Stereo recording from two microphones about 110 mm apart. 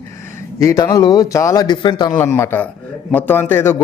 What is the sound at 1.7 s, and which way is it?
Speech, 45° left (ahead or behind).